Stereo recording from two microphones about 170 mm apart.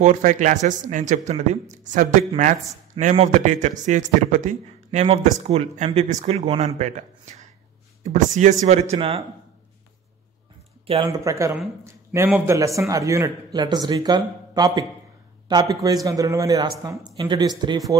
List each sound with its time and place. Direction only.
0.0 s speech: 45° right (ahead or behind)
8.9 s speech: 35° right (ahead or behind)
11.1 s speech: 20° right (ahead or behind)